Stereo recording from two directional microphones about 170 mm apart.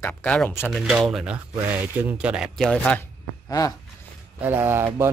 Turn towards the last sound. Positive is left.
turn(degrees=-15)  # may be behind; listen again after turning